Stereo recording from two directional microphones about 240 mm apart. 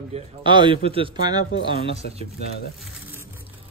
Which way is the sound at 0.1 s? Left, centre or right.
Right.